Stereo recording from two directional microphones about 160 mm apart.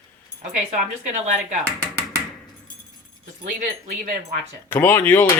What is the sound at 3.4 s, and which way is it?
Speech, 55° right (ahead or behind).